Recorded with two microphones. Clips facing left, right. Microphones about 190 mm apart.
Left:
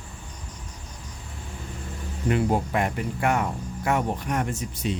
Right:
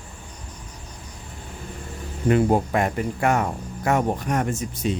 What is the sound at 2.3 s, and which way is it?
Speech, 45° right (ahead or behind).